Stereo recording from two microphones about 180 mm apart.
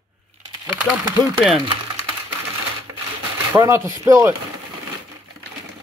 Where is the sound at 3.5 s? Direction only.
15° right (ahead or behind).